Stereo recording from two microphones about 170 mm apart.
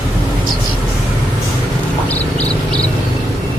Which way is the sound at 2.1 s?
10° left (ahead or behind).